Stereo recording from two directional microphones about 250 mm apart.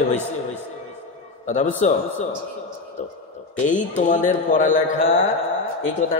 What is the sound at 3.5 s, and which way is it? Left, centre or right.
A man's voice, left.